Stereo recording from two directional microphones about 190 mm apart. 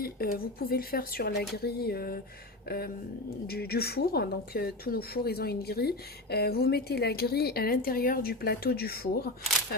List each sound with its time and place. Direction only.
0.0 s a woman's voice: 50° left (ahead or behind)